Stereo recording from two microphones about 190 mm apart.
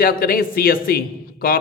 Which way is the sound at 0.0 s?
50° left (ahead or behind).